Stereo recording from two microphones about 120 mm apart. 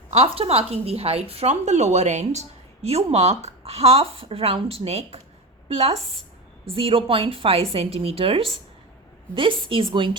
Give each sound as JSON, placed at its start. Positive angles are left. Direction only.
{"t": 0.1, "sound": "a woman's voice", "side_deg": -60}